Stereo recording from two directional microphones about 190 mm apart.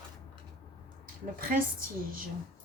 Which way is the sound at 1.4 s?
50° right (ahead or behind).